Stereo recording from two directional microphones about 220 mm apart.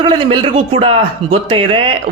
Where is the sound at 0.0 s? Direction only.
25° right (ahead or behind).